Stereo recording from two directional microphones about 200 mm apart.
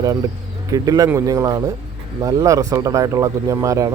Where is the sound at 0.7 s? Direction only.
20° right (ahead or behind).